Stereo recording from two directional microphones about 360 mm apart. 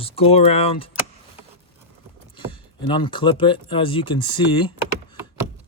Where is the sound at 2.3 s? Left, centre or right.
Centre.